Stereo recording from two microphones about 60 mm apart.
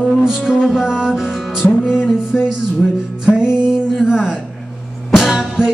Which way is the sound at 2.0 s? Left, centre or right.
Left.